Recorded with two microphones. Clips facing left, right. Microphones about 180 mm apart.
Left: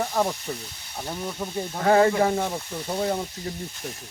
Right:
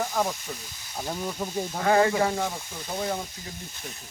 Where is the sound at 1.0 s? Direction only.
5° right (ahead or behind).